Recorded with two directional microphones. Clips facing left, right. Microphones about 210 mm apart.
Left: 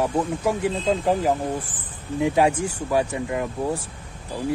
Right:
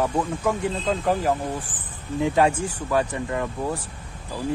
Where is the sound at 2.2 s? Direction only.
10° left (ahead or behind).